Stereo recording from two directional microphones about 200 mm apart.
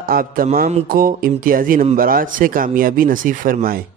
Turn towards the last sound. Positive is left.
turn(degrees=-45)  # may be behind; listen again after turning